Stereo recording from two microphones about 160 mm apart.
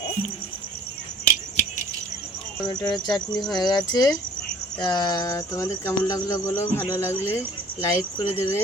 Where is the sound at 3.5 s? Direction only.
25° left (ahead or behind).